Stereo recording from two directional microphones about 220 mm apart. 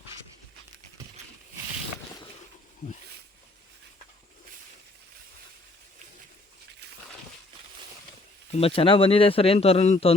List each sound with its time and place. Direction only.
8.5 s speech: 25° left (ahead or behind)